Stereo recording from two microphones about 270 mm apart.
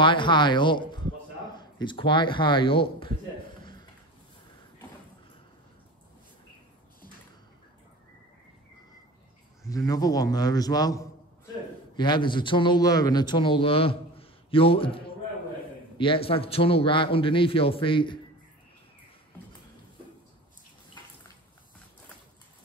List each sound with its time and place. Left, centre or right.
0.0 s speech: centre
9.7 s a man's voice: centre